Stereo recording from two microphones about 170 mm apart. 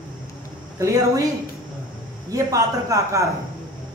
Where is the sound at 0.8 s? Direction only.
20° right (ahead or behind).